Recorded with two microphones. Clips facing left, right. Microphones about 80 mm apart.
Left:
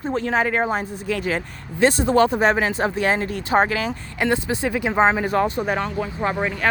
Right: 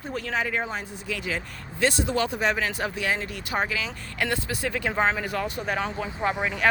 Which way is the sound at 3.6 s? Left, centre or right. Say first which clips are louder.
Left 7 dB; left.